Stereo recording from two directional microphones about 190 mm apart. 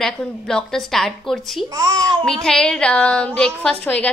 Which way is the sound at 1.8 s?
20° right (ahead or behind).